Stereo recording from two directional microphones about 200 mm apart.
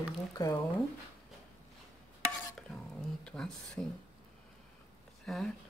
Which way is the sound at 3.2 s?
5° left (ahead or behind).